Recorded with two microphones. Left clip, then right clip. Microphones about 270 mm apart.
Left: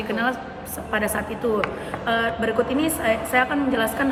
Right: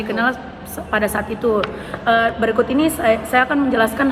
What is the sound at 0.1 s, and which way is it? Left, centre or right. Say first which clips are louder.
A woman's voice: right 5 dB; centre.